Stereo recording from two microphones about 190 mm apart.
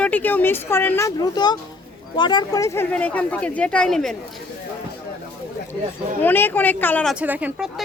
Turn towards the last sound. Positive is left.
turn(degrees=-5)  # may be behind; listen again after turning